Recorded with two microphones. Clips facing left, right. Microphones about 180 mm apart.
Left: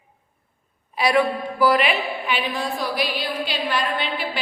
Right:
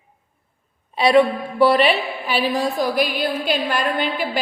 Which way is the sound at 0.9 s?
25° right (ahead or behind).